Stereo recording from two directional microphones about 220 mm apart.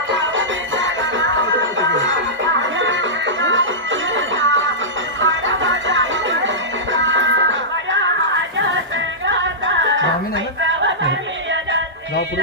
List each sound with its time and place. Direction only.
0.1 s music: 55° right (ahead or behind)
9.2 s music: 55° right (ahead or behind)
10.6 s a sound: 55° right (ahead or behind)